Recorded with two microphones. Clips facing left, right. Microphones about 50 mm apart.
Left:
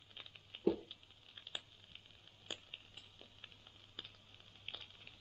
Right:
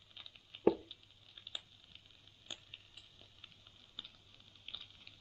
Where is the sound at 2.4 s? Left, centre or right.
Left.